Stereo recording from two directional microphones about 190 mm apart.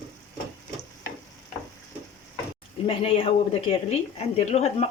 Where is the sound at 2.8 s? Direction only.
30° left (ahead or behind).